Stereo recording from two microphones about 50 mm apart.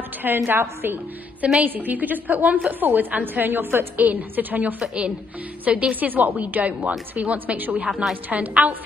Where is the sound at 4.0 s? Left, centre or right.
Right.